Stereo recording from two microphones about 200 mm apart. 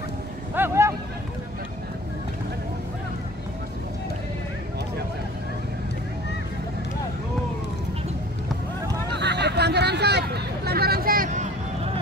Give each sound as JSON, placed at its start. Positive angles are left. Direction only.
{"t": 0.6, "sound": "speech", "side_deg": -15}
{"t": 9.2, "sound": "hubbub", "side_deg": -55}